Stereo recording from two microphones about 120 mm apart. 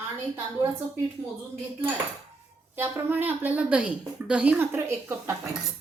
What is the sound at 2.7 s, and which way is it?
A woman's voice, 15° right (ahead or behind).